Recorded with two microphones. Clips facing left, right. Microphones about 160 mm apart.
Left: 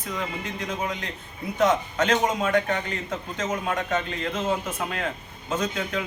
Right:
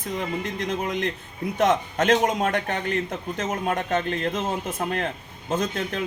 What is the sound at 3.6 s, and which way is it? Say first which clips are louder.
Speech: right 2 dB; 50° right (ahead or behind).